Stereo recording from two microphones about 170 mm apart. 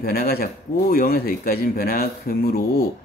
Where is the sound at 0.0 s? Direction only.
60° left (ahead or behind).